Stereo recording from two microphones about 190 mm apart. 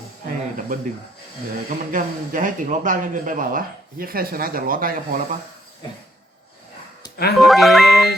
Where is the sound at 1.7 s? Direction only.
45° right (ahead or behind).